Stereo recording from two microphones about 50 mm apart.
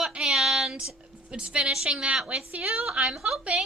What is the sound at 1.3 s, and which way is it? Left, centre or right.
A woman's voice, right.